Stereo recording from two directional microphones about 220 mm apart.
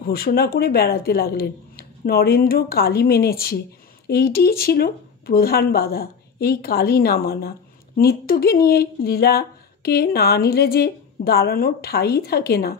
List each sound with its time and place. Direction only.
0.0 s speech: 45° left (ahead or behind)